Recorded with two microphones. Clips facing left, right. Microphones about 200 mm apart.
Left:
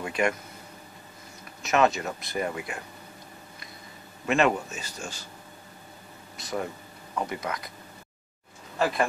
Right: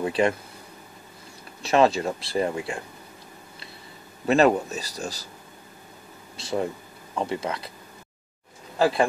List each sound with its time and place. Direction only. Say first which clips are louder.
0.0 s speech: right 4 dB; 30° right (ahead or behind)
1.6 s speech: right 4 dB; 30° right (ahead or behind)
4.3 s speech: right 5 dB; 35° right (ahead or behind)
6.3 s speech: right 5 dB; 30° right (ahead or behind)
8.7 s speech: right 5 dB; 30° right (ahead or behind)